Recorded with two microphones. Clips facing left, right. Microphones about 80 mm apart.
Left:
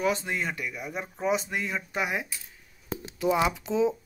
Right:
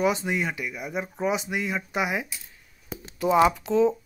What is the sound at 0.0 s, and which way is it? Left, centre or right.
Speech, centre.